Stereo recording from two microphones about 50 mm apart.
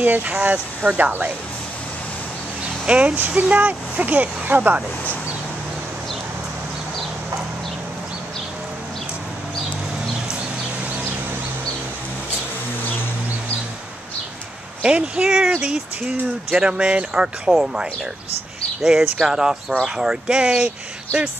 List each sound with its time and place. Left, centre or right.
0.0 s speech: right
2.9 s speech: right
14.8 s speech: right